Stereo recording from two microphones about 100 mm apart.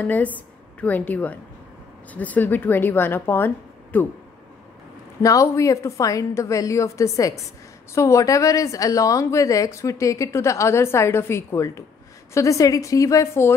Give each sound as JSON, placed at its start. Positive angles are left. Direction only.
{"t": 0.0, "sound": "a woman's voice", "side_deg": 15}
{"t": 5.2, "sound": "a woman's voice", "side_deg": 35}